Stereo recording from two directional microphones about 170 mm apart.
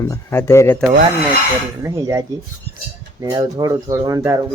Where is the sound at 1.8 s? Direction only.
20° right (ahead or behind).